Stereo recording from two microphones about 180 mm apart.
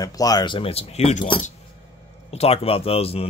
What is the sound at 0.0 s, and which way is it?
Speech, 20° left (ahead or behind).